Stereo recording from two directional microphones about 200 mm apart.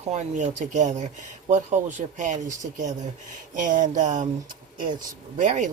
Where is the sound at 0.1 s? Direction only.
35° right (ahead or behind).